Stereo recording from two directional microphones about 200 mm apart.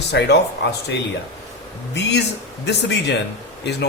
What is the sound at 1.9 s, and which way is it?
A man's voice, 60° left (ahead or behind).